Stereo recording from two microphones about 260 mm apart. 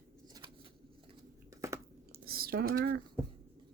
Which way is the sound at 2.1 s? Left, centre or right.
Right.